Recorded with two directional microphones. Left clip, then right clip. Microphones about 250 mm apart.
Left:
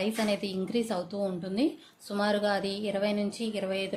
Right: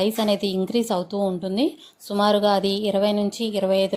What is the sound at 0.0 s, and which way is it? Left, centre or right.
A woman's voice, right.